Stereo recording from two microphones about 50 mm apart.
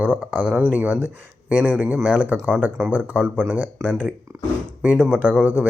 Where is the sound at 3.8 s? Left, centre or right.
Right.